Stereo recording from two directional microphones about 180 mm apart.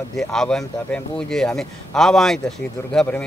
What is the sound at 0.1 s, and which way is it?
Speech, 5° left (ahead or behind).